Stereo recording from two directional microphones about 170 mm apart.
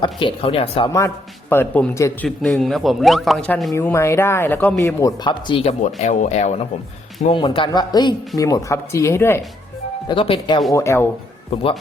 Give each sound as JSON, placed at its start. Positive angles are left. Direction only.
{"t": 0.0, "sound": "speech", "side_deg": 30}
{"t": 0.9, "sound": "speech", "side_deg": 15}
{"t": 5.8, "sound": "speech", "side_deg": 45}
{"t": 7.3, "sound": "a man's voice", "side_deg": 30}
{"t": 10.1, "sound": "a man's voice", "side_deg": 30}
{"t": 10.7, "sound": "speech", "side_deg": 15}